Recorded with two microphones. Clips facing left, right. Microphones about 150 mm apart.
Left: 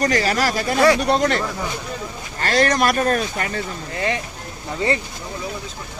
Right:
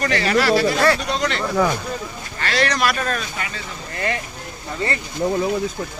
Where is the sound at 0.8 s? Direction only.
15° left (ahead or behind).